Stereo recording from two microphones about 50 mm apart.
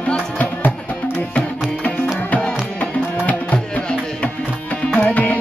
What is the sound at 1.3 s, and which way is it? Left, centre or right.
Tabla, left.